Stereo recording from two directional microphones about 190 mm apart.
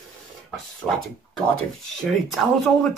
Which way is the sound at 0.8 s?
5° left (ahead or behind).